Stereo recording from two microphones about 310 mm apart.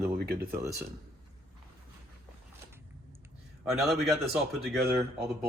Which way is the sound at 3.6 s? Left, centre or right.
Centre.